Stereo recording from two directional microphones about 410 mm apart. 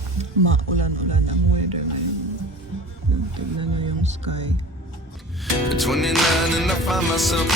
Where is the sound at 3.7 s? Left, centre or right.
Right.